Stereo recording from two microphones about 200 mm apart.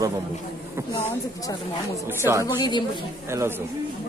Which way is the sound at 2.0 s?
10° right (ahead or behind).